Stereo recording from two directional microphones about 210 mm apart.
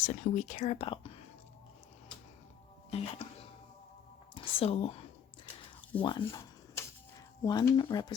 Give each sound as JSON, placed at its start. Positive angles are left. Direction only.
{"t": 0.0, "sound": "speech", "side_deg": 35}
{"t": 2.9, "sound": "speech", "side_deg": 30}
{"t": 4.4, "sound": "speech", "side_deg": 30}
{"t": 6.0, "sound": "dishes", "side_deg": 20}
{"t": 7.4, "sound": "speech", "side_deg": 15}